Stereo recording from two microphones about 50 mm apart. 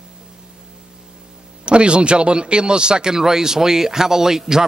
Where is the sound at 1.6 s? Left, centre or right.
Right.